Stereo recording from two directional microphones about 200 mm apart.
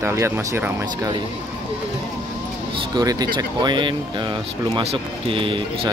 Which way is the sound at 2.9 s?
20° right (ahead or behind).